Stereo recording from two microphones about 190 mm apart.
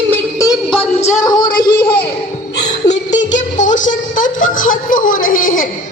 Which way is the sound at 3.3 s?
40° left (ahead or behind).